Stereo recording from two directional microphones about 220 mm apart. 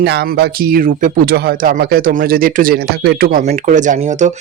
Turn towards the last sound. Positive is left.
turn(degrees=-35)  # may be behind; listen again after turning